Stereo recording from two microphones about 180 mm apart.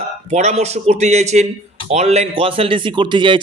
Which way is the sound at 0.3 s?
40° right (ahead or behind).